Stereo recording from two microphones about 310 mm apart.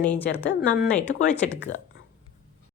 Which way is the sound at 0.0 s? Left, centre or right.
Centre.